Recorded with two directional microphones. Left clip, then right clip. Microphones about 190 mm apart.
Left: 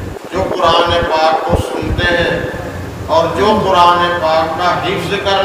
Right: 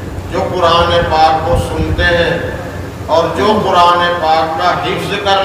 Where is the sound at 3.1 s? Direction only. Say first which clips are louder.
Even; 35° left (ahead or behind).